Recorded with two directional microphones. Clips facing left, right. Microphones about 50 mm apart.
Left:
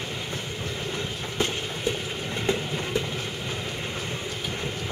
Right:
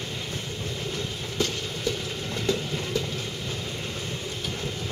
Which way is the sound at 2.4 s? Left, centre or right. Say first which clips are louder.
Left 1 dB; left.